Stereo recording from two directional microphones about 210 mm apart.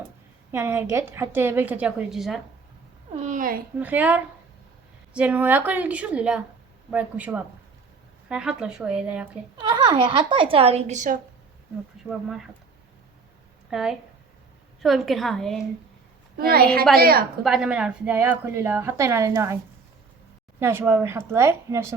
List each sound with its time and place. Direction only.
0.5 s a woman's voice: 10° right (ahead or behind)
3.2 s speech: 35° right (ahead or behind)
3.8 s a woman's voice: 5° right (ahead or behind)
9.6 s speech: 20° right (ahead or behind)
12.0 s speech: centre (ahead or behind)
13.7 s speech: centre (ahead or behind)
16.4 s a woman's voice: 45° right (ahead or behind)
17.4 s a woman's voice: 5° right (ahead or behind)
20.6 s a woman's voice: 10° right (ahead or behind)